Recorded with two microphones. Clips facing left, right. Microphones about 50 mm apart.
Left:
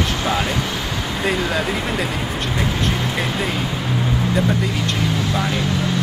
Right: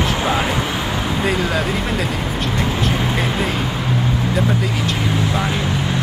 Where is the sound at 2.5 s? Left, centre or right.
Centre.